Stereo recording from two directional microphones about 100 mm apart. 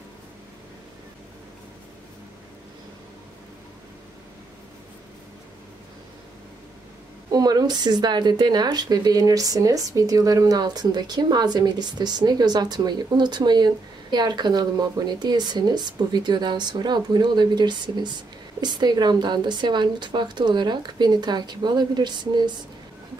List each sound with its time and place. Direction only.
7.2 s speech: 40° right (ahead or behind)